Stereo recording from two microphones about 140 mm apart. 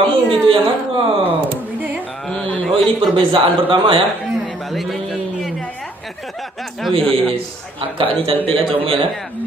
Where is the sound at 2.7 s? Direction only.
40° right (ahead or behind).